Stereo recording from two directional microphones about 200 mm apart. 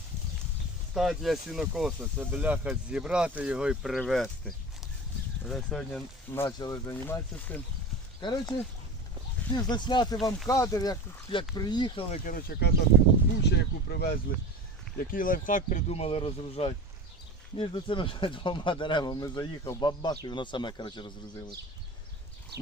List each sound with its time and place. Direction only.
0.9 s speech: centre (ahead or behind)
8.2 s speech: 20° left (ahead or behind)
22.5 s goat: 55° right (ahead or behind)